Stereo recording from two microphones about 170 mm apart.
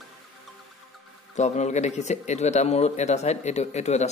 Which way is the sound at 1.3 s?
45° left (ahead or behind).